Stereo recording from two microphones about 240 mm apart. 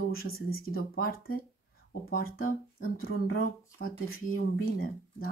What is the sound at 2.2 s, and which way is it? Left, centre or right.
Speech, left.